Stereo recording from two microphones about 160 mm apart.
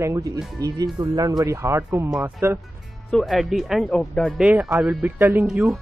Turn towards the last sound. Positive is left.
turn(degrees=0)  # may be behind; listen again after turning